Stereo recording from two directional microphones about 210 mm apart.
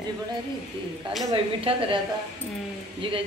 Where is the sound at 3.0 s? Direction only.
25° right (ahead or behind).